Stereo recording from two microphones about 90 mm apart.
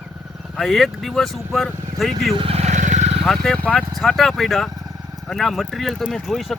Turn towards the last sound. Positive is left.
turn(degrees=0)  # may be behind; listen again after turning